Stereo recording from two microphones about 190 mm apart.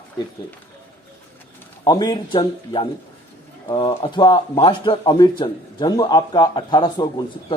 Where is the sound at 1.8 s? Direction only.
20° left (ahead or behind).